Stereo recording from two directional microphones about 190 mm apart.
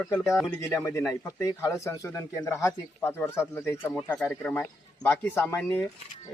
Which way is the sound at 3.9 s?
Centre (ahead or behind).